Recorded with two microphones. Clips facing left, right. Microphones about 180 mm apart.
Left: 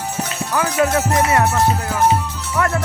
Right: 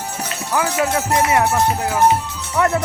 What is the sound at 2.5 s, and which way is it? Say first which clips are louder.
Speech: right 2 dB; 20° right (ahead or behind).